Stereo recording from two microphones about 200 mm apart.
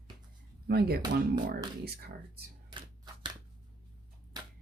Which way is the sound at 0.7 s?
50° right (ahead or behind).